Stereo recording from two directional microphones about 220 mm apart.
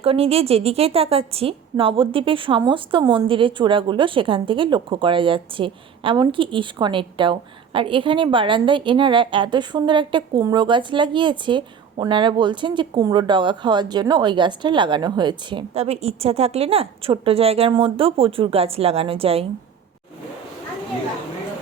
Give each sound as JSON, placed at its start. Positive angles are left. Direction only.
{"t": 0.0, "sound": "a woman's voice", "side_deg": -25}